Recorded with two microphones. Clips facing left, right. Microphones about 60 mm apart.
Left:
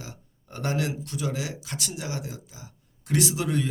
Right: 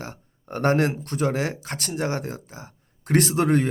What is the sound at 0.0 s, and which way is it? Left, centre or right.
Speech, right.